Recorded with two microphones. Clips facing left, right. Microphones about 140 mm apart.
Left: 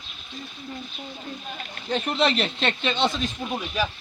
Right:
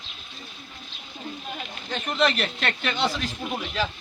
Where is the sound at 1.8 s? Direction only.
35° left (ahead or behind); by 3.9 s 15° left (ahead or behind).